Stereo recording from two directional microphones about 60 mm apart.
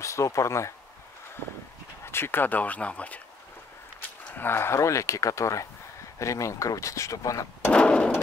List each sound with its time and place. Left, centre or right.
0.0 s speech: left
2.0 s speech: left
4.3 s speech: left
4.7 s speech: left
7.7 s a sound: centre